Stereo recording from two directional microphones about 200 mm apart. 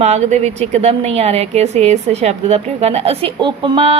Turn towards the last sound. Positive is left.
turn(degrees=-25)  # may be behind; listen again after turning